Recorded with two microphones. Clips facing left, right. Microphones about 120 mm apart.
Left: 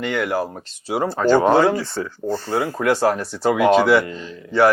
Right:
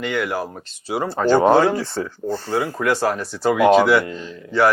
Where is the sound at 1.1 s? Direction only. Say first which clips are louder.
Right 1 dB; 25° right (ahead or behind).